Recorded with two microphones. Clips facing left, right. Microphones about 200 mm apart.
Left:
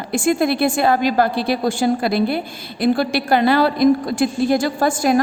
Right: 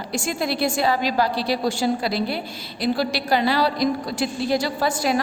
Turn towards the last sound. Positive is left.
turn(degrees=50)  # may be behind; listen again after turning